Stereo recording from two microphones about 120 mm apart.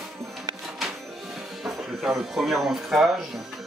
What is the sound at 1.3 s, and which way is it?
Speech, centre (ahead or behind).